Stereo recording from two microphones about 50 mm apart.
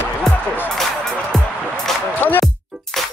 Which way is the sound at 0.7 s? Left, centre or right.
Centre.